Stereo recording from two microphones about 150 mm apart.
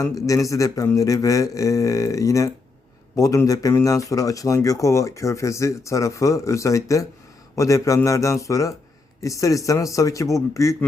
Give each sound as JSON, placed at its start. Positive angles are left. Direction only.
{"t": 0.0, "sound": "speech", "side_deg": 20}